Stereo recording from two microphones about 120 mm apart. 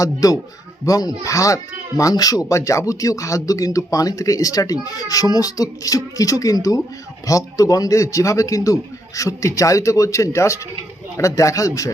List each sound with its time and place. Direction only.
0.0 s speech: 30° left (ahead or behind)